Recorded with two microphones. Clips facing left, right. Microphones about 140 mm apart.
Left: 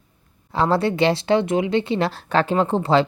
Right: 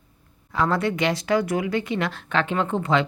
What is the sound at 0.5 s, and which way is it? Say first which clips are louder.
Speech: left 3 dB; 30° left (ahead or behind).